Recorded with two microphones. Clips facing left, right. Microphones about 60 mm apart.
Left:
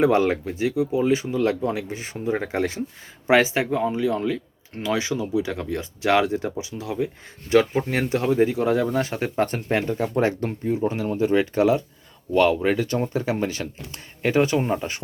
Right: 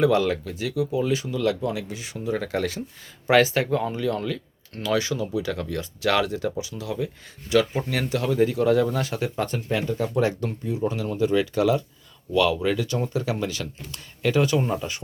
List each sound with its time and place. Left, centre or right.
0.0 s speech: left